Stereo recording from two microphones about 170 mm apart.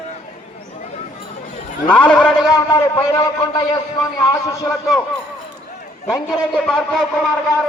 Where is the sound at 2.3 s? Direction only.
25° left (ahead or behind).